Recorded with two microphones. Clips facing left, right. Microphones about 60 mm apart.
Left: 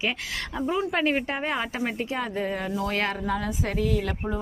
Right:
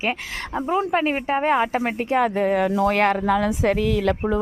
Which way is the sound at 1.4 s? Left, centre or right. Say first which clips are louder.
Right 8 dB; right.